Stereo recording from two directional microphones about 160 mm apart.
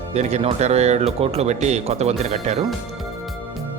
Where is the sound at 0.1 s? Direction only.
45° right (ahead or behind).